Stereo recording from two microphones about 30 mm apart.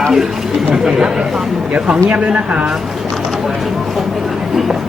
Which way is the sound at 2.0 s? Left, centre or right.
Right.